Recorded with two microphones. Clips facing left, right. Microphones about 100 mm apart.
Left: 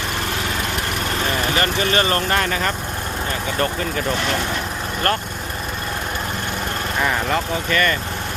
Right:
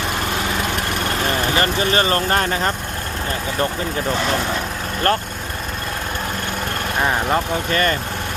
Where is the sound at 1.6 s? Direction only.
30° right (ahead or behind).